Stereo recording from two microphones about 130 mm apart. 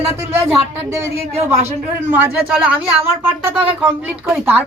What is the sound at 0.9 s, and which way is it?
Speech, 20° right (ahead or behind).